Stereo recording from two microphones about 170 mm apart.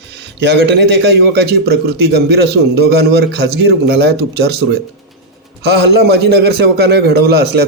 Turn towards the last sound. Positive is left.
turn(degrees=-70)  # may be behind; listen again after turning